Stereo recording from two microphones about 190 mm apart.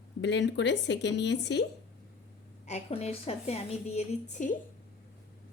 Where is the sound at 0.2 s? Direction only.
70° left (ahead or behind).